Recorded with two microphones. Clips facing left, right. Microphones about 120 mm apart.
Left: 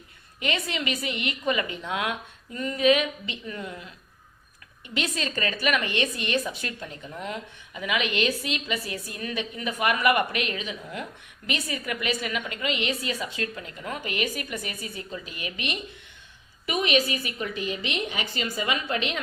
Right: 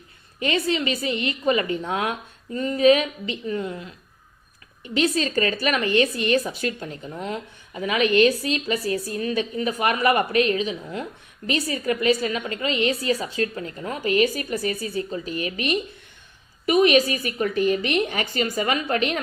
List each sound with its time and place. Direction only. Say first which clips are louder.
0.3 s a woman's voice: right 6 dB; 35° right (ahead or behind)
4.9 s a woman's voice: right 8 dB; 35° right (ahead or behind)